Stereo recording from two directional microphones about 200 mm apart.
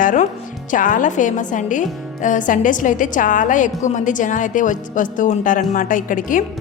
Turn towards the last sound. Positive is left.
turn(degrees=40)  # may be behind; listen again after turning